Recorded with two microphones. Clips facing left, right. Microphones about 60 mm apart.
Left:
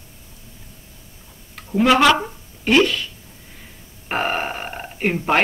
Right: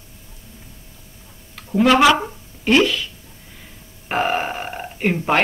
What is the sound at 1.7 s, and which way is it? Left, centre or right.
Speech, centre.